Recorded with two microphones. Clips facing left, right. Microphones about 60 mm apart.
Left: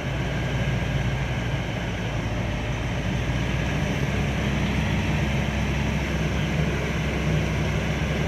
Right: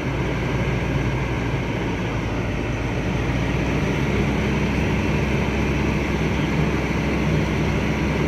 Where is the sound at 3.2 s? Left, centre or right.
Right.